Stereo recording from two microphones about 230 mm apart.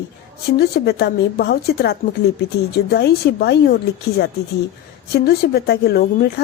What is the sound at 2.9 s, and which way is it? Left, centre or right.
Speech, left.